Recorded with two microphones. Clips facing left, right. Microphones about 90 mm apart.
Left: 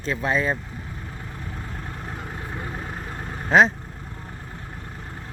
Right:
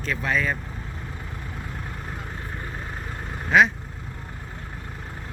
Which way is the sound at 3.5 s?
35° left (ahead or behind).